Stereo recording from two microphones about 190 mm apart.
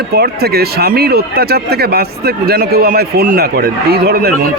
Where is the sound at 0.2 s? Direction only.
55° right (ahead or behind).